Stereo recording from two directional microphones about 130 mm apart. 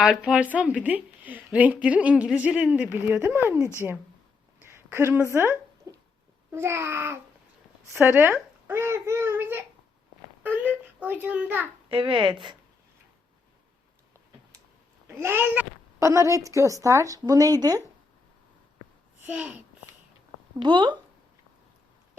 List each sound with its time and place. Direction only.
0.0 s speech: 5° right (ahead or behind)
4.6 s a sound: 15° right (ahead or behind)
6.5 s a woman's voice: 20° right (ahead or behind)
11.9 s speech: 40° right (ahead or behind)
15.0 s a woman's voice: 20° right (ahead or behind)
19.2 s speech: 10° right (ahead or behind)
20.6 s speech: 35° right (ahead or behind)